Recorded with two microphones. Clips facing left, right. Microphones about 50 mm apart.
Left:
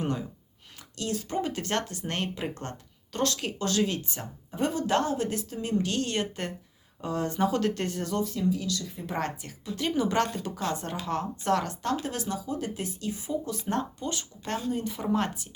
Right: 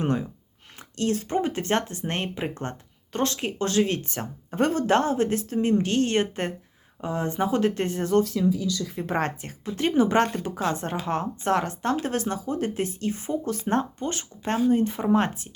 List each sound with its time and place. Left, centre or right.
0.0 s a sound: right
0.8 s speech: right
3.9 s speech: right